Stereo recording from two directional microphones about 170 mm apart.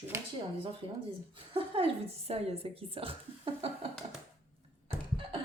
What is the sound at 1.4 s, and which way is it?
A woman's voice, 30° right (ahead or behind).